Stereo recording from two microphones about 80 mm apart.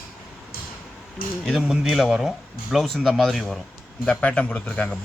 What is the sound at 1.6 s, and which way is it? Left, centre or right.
Speech, centre.